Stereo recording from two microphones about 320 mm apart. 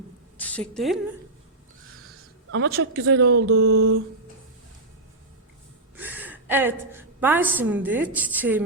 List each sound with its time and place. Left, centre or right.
0.3 s a sound: centre
2.5 s speech: right
6.0 s a woman's voice: centre